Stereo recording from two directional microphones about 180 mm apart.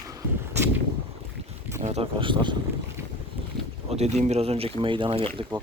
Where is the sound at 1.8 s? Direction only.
35° right (ahead or behind).